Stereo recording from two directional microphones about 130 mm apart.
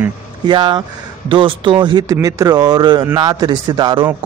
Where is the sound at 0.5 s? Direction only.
35° right (ahead or behind).